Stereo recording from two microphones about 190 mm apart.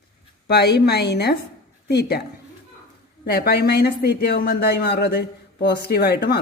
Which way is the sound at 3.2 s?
55° left (ahead or behind).